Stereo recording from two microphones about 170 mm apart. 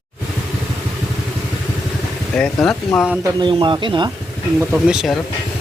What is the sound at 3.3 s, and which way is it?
Speech, 30° right (ahead or behind).